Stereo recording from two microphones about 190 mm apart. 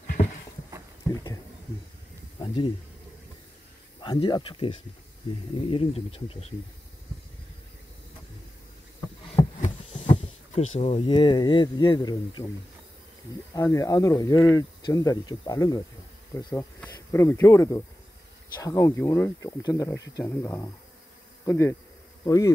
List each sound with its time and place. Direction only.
2.3 s a sound: 25° left (ahead or behind)
4.0 s speech: 25° left (ahead or behind)
9.4 s heart sounds: 20° left (ahead or behind)
10.5 s speech: 35° left (ahead or behind)
13.6 s speech: 15° left (ahead or behind)
22.2 s bee: 15° left (ahead or behind)